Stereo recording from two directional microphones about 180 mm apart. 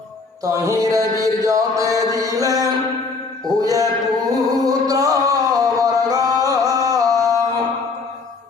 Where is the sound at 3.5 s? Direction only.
20° right (ahead or behind).